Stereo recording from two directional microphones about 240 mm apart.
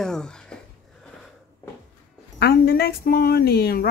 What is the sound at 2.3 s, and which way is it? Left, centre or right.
A woman's voice, left.